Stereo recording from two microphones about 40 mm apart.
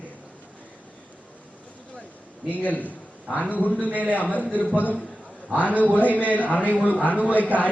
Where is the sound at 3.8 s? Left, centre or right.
Right.